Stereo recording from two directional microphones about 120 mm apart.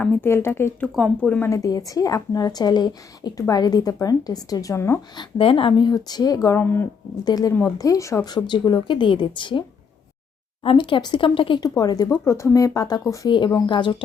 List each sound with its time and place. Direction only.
0.0 s a woman's voice: 20° left (ahead or behind)
0.9 s speech: 5° left (ahead or behind)
1.4 s a woman's voice: 25° left (ahead or behind)
5.4 s speech: 50° left (ahead or behind); by 6.8 s 15° left (ahead or behind)
7.3 s speech: 30° left (ahead or behind)
11.8 s speech: 30° left (ahead or behind)